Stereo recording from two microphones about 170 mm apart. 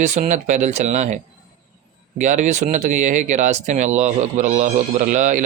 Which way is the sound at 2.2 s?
45° right (ahead or behind).